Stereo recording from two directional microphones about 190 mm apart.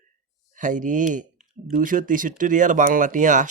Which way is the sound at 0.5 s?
40° right (ahead or behind).